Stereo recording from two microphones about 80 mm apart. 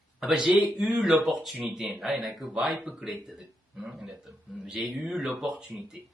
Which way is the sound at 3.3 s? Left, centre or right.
Centre.